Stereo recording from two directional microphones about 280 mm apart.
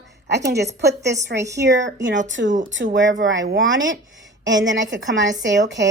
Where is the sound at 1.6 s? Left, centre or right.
Right.